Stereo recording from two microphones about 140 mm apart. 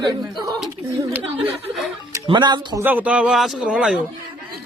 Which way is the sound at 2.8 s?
15° right (ahead or behind).